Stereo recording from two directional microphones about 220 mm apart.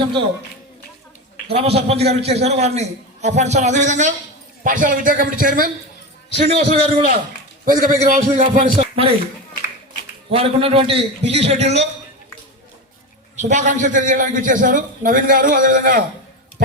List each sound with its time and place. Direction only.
1.5 s a man's voice: 30° right (ahead or behind)
10.3 s a man's voice: 25° right (ahead or behind)
13.3 s a man's voice: 35° right (ahead or behind)